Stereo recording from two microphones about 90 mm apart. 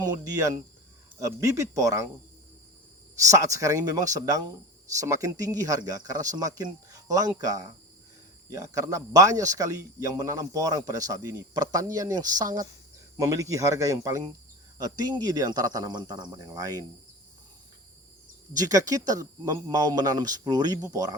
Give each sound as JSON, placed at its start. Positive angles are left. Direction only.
{"t": 0.0, "sound": "speech", "side_deg": -40}
{"t": 3.2, "sound": "speech", "side_deg": -35}
{"t": 18.5, "sound": "speech", "side_deg": -40}